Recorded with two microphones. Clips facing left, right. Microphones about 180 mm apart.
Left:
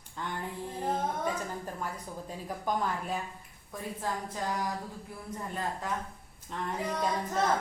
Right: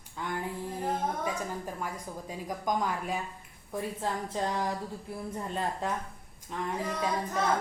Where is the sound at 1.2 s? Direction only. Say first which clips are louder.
Even; 10° right (ahead or behind).